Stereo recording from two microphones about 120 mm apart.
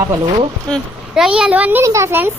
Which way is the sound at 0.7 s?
5° left (ahead or behind).